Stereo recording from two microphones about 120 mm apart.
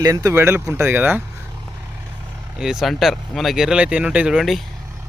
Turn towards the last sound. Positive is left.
turn(degrees=0)  # may be behind; listen again after turning